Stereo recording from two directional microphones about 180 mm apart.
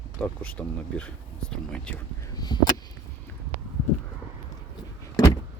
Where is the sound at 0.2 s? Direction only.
5° left (ahead or behind).